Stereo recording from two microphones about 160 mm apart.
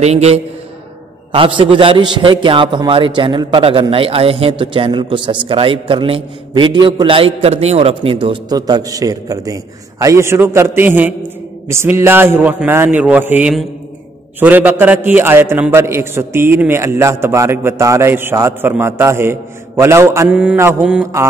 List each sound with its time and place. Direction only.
0.0 s a man's voice: 40° right (ahead or behind); by 21.0 s 10° right (ahead or behind)